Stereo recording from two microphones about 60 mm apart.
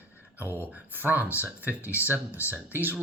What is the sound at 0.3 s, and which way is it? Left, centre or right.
Speech, right.